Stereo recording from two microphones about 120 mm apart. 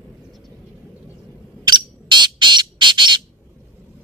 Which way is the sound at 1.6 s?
35° right (ahead or behind).